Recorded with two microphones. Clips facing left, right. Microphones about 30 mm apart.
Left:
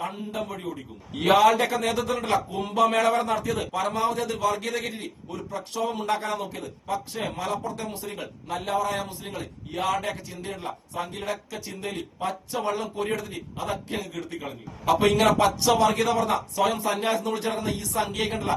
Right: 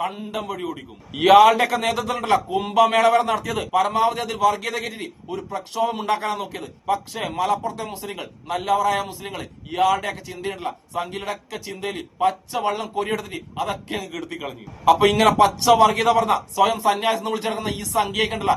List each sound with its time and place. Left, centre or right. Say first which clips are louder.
0.0 s a man's voice: right 4 dB; right
3.8 s a man's voice: right 8 dB; right
5.0 s a man's voice: right 5 dB; right
11.8 s a man's voice: right 9 dB; right
14.8 s a man's voice: right 5 dB; right
15.4 s speech: right 5 dB; right
15.7 s a man's voice: right 8 dB; right